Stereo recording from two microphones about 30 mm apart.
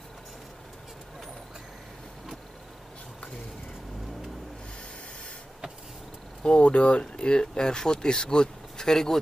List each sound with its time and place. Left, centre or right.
6.6 s speech: left; by 9.2 s centre